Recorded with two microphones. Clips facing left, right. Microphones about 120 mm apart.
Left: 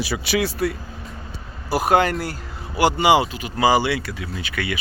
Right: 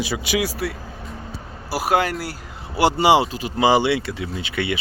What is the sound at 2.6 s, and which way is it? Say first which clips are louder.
Speech: right 1 dB; 30° right (ahead or behind).